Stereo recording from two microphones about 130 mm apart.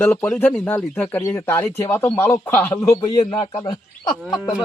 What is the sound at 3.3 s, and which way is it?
Speech, 40° left (ahead or behind).